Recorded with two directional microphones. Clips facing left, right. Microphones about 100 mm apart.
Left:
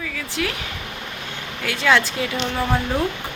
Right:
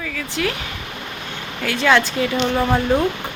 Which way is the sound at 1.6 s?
5° left (ahead or behind).